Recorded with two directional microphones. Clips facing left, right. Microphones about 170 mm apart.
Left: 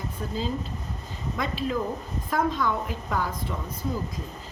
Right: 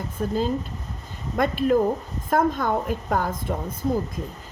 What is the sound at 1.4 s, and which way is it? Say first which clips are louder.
A woman's voice: right 8 dB; 55° right (ahead or behind).